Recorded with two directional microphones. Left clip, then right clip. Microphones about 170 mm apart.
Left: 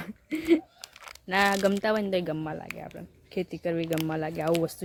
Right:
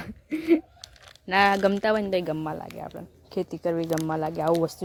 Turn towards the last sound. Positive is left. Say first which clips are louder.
# right 3 dB
turn(degrees=-5)  # may be behind; listen again after turning